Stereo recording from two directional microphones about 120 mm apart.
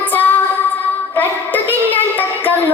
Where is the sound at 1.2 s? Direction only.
15° left (ahead or behind).